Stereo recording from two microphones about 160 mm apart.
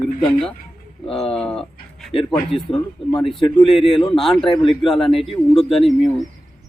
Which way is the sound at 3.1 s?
30° left (ahead or behind).